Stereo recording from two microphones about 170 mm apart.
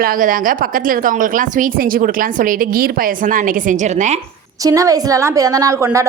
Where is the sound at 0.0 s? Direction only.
55° right (ahead or behind).